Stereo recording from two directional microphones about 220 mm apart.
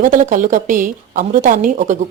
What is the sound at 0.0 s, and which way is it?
Speech, 35° right (ahead or behind).